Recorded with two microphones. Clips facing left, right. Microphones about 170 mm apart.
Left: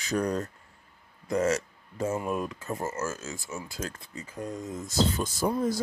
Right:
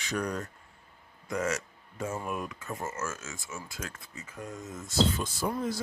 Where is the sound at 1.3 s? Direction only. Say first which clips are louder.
Left 5 dB; 40° left (ahead or behind).